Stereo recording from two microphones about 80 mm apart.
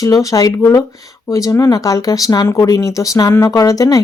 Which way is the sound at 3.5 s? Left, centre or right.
Left.